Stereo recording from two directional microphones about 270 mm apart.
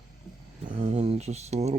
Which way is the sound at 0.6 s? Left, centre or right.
Centre.